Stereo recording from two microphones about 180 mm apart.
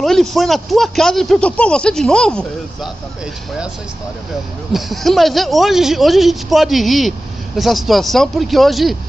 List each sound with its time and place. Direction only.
0.0 s speech: centre (ahead or behind)
4.7 s speech: centre (ahead or behind)